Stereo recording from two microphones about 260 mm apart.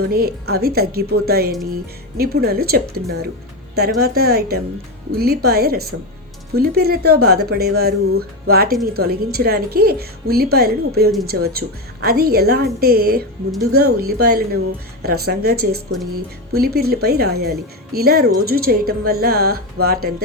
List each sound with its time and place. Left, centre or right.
0.1 s speech: right